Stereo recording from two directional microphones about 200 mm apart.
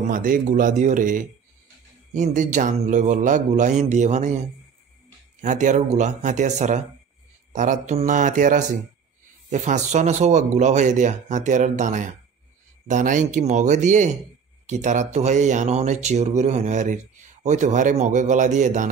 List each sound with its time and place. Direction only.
0.0 s speech: 40° right (ahead or behind)